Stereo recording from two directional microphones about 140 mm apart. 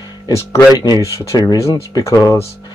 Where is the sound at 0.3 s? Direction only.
20° left (ahead or behind).